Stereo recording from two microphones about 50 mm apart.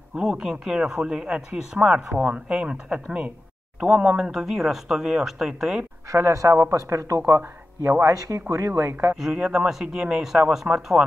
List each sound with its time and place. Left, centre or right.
0.1 s speech: centre
4.3 s speech: centre
6.0 s speech: right
7.2 s speech: right
9.1 s speech: centre